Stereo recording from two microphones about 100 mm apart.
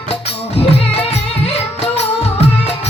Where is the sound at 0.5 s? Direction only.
90° left.